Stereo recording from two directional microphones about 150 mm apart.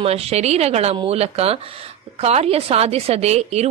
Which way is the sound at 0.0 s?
45° right (ahead or behind).